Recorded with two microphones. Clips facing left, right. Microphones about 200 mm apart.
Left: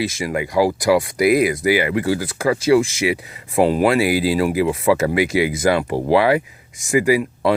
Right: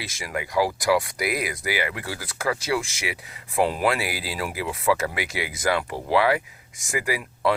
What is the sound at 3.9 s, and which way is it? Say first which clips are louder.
Speech: left 13 dB; 15° left (ahead or behind).